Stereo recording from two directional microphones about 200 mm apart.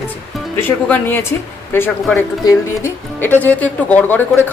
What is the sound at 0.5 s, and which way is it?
Speech, 10° left (ahead or behind).